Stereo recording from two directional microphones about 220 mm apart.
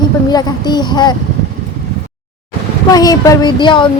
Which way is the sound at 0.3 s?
20° left (ahead or behind).